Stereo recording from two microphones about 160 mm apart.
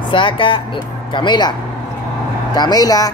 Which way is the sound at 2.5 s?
25° left (ahead or behind).